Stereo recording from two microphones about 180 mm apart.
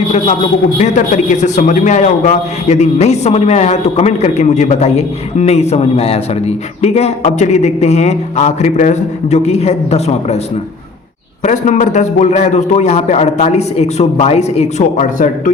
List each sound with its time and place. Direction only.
0.8 s a man's voice: 40° left (ahead or behind)
11.4 s a man's voice: 40° left (ahead or behind)